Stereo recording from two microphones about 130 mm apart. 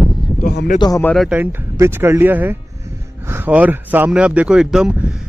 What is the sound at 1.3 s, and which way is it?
Speech, 15° right (ahead or behind).